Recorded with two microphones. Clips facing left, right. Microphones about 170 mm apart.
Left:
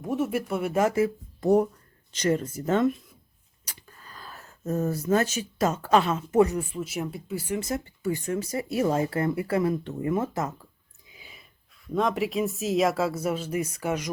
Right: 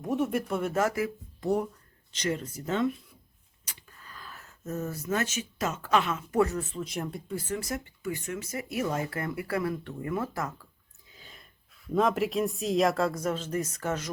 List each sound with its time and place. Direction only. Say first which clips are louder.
0.0 s speech: left 1 dB; centre (ahead or behind); by 1.1 s 20° left (ahead or behind)
1.4 s speech: left 7 dB; 40° left (ahead or behind)
3.7 s speech: left 2 dB; 35° left (ahead or behind)
6.4 s speech: left 3 dB; 15° left (ahead or behind)
7.6 s speech: left 5 dB; 30° left (ahead or behind)
11.1 s gasp: left 1 dB; 10° left (ahead or behind)
11.9 s speech: even; centre (ahead or behind)